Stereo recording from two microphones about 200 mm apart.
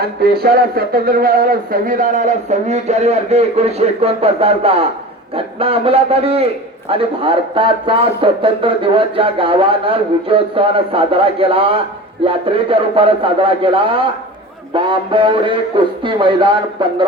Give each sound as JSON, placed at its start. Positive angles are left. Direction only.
{"t": 0.2, "sound": "speech", "side_deg": -50}